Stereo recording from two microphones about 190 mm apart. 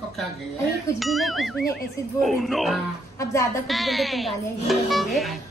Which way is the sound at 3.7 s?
Centre (ahead or behind).